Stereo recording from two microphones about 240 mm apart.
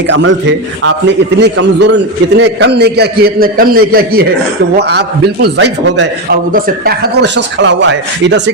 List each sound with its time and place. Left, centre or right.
0.1 s a man's voice: right